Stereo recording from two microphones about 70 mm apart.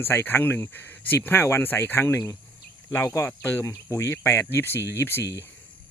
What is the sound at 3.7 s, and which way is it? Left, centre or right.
Speech, left.